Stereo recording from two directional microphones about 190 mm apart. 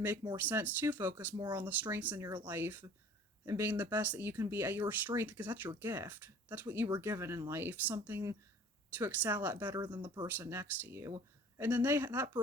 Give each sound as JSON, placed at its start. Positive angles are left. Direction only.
{"t": 0.3, "sound": "speech", "side_deg": -10}
{"t": 1.4, "sound": "speech", "side_deg": -20}
{"t": 1.6, "sound": "speech", "side_deg": -10}